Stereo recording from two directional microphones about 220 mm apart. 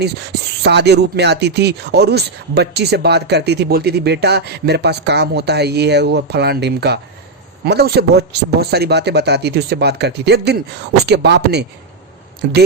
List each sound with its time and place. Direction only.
0.6 s speech: 50° right (ahead or behind)